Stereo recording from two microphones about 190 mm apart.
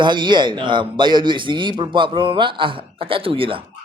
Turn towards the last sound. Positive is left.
turn(degrees=-30)  # may be behind; listen again after turning